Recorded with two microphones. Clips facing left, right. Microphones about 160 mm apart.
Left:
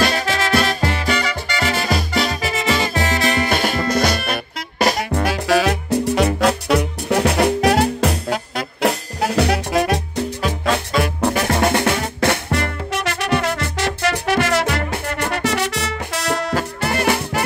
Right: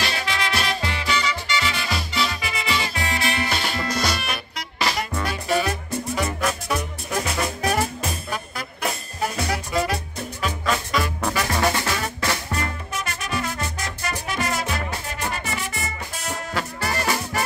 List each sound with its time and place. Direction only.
0.0 s music: 45° left (ahead or behind)
3.4 s music: 50° left (ahead or behind)
5.2 s music: 90° left
11.6 s music: 65° left (ahead or behind)